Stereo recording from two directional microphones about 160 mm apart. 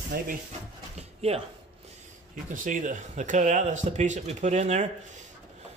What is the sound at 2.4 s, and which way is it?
Speech, 55° right (ahead or behind).